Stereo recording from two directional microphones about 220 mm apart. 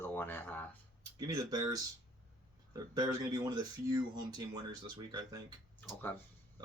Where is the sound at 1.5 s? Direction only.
20° right (ahead or behind).